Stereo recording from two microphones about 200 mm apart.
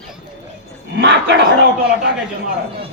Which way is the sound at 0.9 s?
60° right (ahead or behind).